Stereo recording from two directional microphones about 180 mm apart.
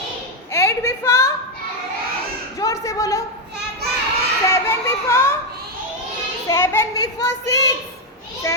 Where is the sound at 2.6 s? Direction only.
20° left (ahead or behind).